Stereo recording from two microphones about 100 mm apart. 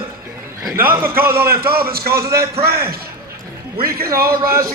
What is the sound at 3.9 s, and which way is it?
Speech, 30° right (ahead or behind).